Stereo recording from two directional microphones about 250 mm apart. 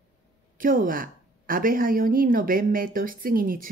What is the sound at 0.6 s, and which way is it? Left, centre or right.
Speech, right.